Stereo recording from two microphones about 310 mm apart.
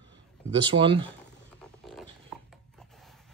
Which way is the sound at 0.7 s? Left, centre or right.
Centre.